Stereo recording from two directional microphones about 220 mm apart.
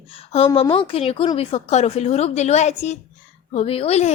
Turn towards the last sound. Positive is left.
turn(degrees=30)  # may be behind; listen again after turning